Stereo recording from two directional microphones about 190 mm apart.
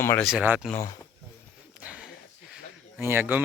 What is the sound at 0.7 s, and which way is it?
Speech, 15° left (ahead or behind).